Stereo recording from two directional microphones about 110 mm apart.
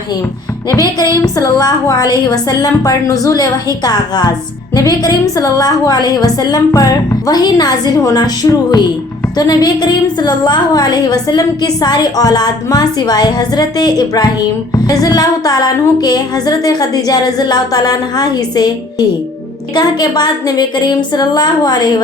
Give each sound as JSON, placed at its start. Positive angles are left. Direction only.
{"t": 0.7, "sound": "a woman's voice", "side_deg": 35}